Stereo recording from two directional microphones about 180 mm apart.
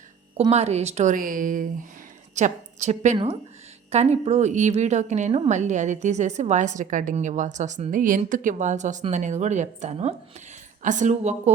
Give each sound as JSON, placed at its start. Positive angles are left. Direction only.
{"t": 0.5, "sound": "a woman's voice", "side_deg": -35}